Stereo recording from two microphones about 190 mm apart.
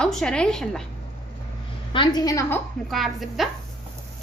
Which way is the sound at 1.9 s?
25° left (ahead or behind).